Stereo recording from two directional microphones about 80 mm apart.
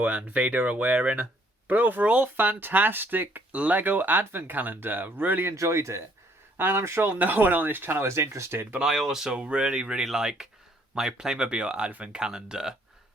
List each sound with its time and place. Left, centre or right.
0.0 s speech: centre
5.5 s speech: right
8.8 s speech: centre